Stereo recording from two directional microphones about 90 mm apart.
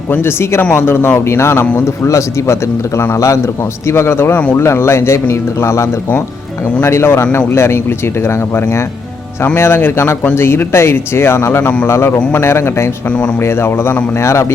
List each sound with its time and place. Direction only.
0.1 s speech: 25° left (ahead or behind)
11.6 s speech: 15° left (ahead or behind)
11.9 s speech: 30° left (ahead or behind)
13.1 s speech: 10° left (ahead or behind)
13.4 s speech: 25° left (ahead or behind)